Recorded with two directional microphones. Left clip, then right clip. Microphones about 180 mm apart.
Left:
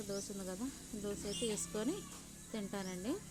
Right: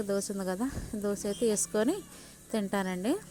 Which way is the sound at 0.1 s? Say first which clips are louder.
Right 10 dB; 40° right (ahead or behind).